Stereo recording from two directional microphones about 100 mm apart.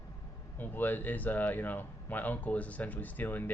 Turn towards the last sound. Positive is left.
turn(degrees=20)  # may be behind; listen again after turning